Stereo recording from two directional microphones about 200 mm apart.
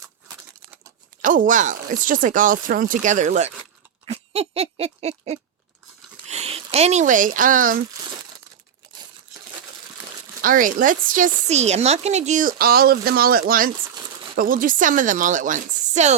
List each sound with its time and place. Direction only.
1.2 s speech: 40° right (ahead or behind)
4.0 s a sound: 30° right (ahead or behind)
6.2 s speech: 30° right (ahead or behind)
10.4 s speech: 45° right (ahead or behind)